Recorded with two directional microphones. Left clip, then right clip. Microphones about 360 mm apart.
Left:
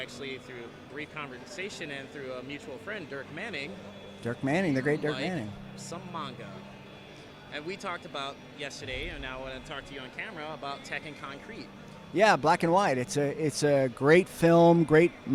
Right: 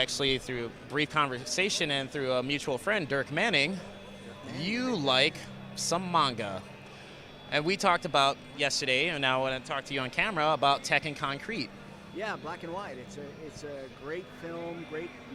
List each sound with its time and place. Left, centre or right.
0.0 s speech: right
4.7 s speech: right
7.5 s speech: right
12.1 s speech: left